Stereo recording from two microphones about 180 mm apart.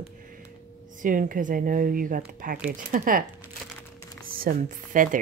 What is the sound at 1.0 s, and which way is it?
Speech, 50° right (ahead or behind).